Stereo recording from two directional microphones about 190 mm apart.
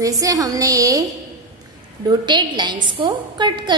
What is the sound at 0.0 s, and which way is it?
A woman's voice, 15° right (ahead or behind).